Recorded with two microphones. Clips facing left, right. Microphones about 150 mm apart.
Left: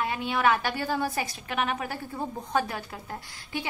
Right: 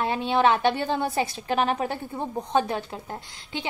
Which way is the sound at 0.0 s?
30° right (ahead or behind).